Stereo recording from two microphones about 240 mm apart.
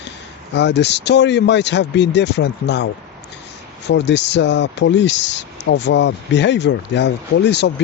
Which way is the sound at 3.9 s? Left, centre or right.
Left.